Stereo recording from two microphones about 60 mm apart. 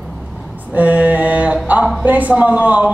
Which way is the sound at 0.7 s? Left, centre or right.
Right.